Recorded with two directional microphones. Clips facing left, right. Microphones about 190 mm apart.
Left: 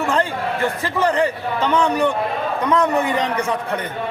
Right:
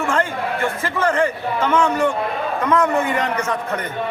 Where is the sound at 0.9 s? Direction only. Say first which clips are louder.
Left 1 dB; 15° left (ahead or behind).